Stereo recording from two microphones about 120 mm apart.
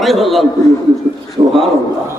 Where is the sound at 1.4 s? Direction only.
45° right (ahead or behind).